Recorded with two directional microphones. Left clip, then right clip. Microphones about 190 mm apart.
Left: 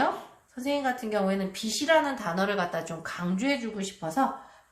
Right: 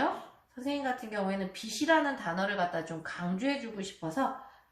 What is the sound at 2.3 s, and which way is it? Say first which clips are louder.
Speech: left 4 dB; 45° left (ahead or behind).